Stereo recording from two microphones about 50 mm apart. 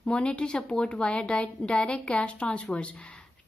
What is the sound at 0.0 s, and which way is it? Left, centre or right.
A woman's voice, left.